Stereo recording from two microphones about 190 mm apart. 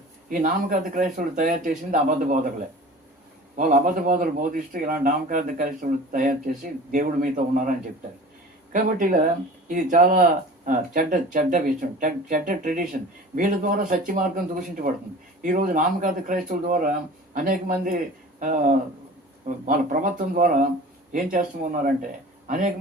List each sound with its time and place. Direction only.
0.3 s a man's voice: 45° right (ahead or behind)
3.6 s a man's voice: 45° right (ahead or behind)
8.7 s a man's voice: 45° right (ahead or behind)